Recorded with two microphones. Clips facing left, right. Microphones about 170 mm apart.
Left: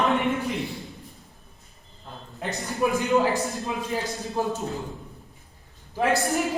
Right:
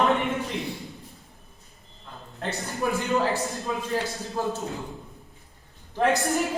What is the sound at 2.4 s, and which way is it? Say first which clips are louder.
A man's voice: left 3 dB; 15° left (ahead or behind).